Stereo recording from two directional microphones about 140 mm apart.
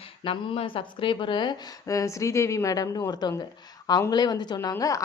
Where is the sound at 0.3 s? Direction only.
40° left (ahead or behind).